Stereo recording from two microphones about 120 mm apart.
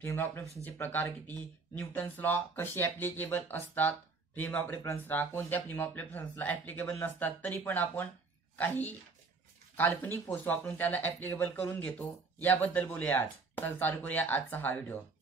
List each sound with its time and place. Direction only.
0.0 s speech: 20° left (ahead or behind)